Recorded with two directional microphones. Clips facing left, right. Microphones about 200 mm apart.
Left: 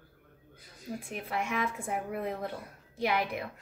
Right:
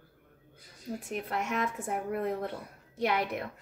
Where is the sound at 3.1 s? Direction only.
45° right (ahead or behind).